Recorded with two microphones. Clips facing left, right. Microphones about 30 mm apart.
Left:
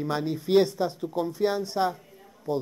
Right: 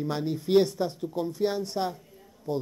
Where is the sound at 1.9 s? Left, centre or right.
Left.